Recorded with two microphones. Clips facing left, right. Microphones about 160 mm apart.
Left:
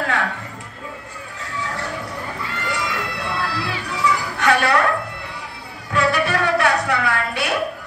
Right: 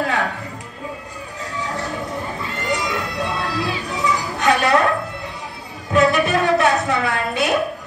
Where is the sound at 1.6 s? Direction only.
20° right (ahead or behind).